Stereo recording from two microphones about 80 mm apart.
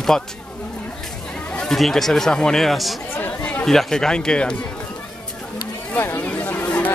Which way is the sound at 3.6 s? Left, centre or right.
Centre.